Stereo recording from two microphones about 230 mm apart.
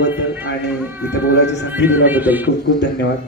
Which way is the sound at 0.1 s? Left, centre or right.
Centre.